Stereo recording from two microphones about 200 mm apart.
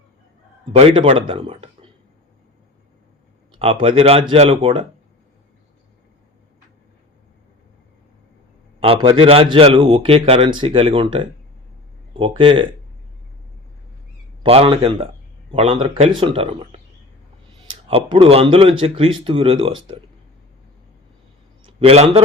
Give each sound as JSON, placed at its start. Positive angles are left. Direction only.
{"t": 0.7, "sound": "a man's voice", "side_deg": -30}
{"t": 3.5, "sound": "a man's voice", "side_deg": -25}
{"t": 8.8, "sound": "a man's voice", "side_deg": -25}
{"t": 14.4, "sound": "a man's voice", "side_deg": -30}
{"t": 17.8, "sound": "a man's voice", "side_deg": -25}
{"t": 21.6, "sound": "a sound", "side_deg": -25}